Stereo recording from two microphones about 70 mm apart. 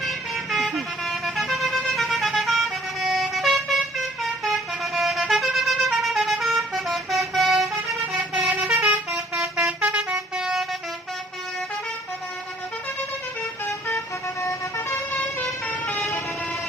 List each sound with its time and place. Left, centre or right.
0.0 s vehicle: centre
8.0 s vehicle: centre
9.6 s vehicle horn: centre
10.2 s vehicle: centre
13.7 s vehicle: left
15.1 s vehicle: centre
16.0 s vehicle: centre